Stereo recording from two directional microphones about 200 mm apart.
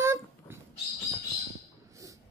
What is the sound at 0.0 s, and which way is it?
Dog, 15° right (ahead or behind).